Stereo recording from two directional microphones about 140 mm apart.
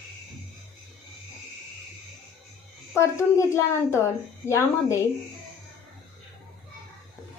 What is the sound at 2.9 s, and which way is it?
A woman's voice, 20° left (ahead or behind).